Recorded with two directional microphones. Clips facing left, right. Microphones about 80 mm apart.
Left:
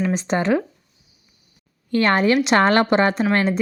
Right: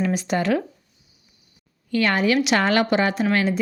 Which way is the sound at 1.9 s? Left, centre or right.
Left.